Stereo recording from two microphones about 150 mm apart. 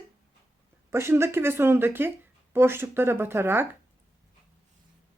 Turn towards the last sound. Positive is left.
turn(degrees=-15)  # may be behind; listen again after turning